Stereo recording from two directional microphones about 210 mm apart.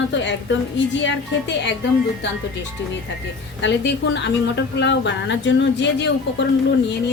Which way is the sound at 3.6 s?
55° left (ahead or behind).